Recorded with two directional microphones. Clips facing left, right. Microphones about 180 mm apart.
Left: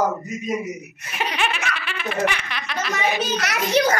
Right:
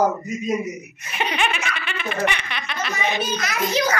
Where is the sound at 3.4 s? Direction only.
70° left (ahead or behind).